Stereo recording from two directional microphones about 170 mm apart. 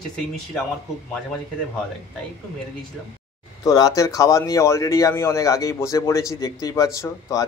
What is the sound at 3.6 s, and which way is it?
Speech, 20° left (ahead or behind).